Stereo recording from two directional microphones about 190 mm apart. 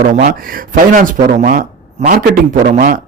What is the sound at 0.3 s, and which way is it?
Speech, 50° right (ahead or behind).